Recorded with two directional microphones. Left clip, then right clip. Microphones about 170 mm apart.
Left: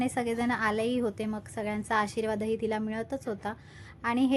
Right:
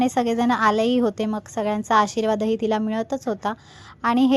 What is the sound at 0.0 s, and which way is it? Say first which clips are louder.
A woman's voice: right 9 dB; 30° right (ahead or behind).